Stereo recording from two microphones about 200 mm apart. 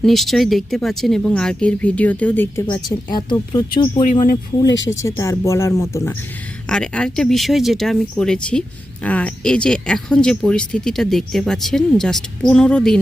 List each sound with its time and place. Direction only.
0.0 s speech: centre (ahead or behind)
2.7 s a woman's voice: 20° left (ahead or behind)
4.0 s speech: 40° left (ahead or behind)
4.9 s speech: 15° left (ahead or behind)
6.7 s speech: 5° left (ahead or behind)